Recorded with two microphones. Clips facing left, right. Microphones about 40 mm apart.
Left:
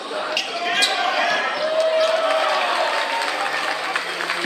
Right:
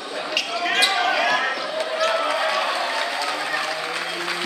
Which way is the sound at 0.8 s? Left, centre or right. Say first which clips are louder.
Even; centre.